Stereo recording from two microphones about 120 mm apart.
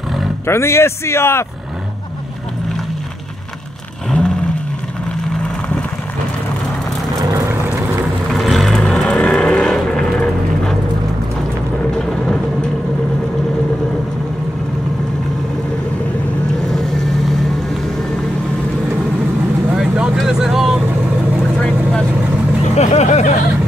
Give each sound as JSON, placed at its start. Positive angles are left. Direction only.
{"t": 0.5, "sound": "a man's voice", "side_deg": 20}
{"t": 8.3, "sound": "vehicle", "side_deg": 0}
{"t": 16.7, "sound": "vehicle", "side_deg": 0}
{"t": 19.7, "sound": "vehicle", "side_deg": -5}
{"t": 22.8, "sound": "vehicle", "side_deg": 75}